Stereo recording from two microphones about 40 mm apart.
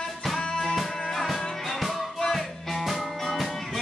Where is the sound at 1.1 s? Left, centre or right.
Centre.